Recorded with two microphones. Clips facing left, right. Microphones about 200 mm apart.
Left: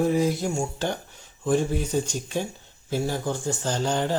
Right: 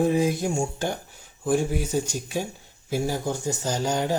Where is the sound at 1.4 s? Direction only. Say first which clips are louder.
Even; 10° right (ahead or behind).